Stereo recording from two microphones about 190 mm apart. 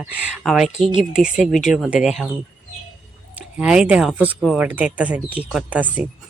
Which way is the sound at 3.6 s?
5° right (ahead or behind).